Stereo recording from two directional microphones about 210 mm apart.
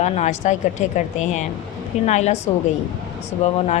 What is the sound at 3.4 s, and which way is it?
Speech, 30° left (ahead or behind).